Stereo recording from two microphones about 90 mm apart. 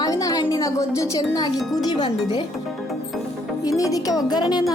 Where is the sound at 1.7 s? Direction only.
50° left (ahead or behind).